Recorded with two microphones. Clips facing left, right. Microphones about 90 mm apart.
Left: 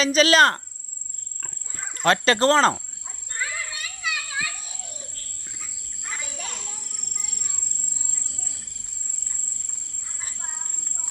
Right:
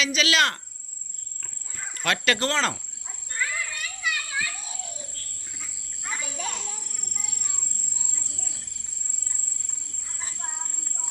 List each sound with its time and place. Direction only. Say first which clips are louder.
0.0 s speech: left 6 dB; 40° left (ahead or behind)
1.4 s cricket: left 2 dB; 30° left (ahead or behind)
3.3 s children playing: right 1 dB; 15° left (ahead or behind)